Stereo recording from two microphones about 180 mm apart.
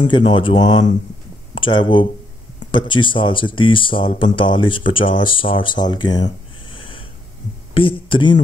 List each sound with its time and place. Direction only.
0.1 s speech: 30° left (ahead or behind)